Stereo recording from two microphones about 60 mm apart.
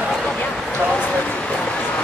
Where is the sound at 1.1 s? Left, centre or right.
Centre.